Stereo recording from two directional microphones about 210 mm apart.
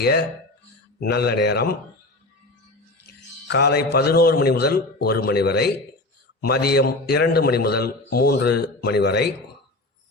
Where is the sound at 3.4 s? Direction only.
55° left (ahead or behind).